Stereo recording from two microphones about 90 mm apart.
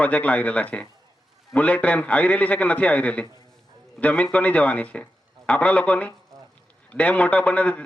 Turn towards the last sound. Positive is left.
turn(degrees=15)  # may be behind; listen again after turning